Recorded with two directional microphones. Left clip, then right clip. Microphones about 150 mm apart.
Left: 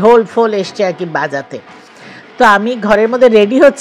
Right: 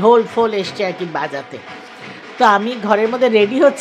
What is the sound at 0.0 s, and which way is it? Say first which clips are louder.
A woman's voice: left 4 dB; 25° left (ahead or behind).